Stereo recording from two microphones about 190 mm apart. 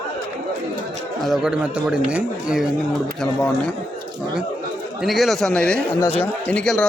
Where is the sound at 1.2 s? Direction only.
Centre (ahead or behind).